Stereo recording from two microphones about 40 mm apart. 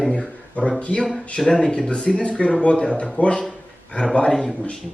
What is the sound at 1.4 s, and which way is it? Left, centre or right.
Speech, centre.